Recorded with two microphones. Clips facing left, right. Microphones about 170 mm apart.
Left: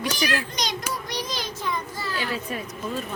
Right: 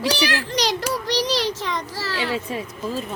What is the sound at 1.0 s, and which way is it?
Child singing, 80° right.